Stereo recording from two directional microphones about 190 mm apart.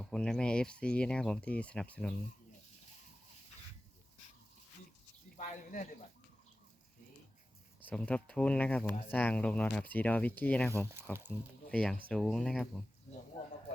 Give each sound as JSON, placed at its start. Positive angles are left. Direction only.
{"t": 0.0, "sound": "speech", "side_deg": 5}
{"t": 5.4, "sound": "speech", "side_deg": 45}
{"t": 7.9, "sound": "speech", "side_deg": 5}